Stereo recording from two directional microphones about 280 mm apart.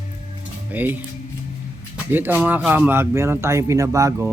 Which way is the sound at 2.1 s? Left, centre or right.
Centre.